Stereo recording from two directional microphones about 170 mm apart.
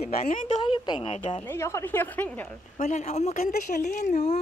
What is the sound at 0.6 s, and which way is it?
Speech, 25° left (ahead or behind).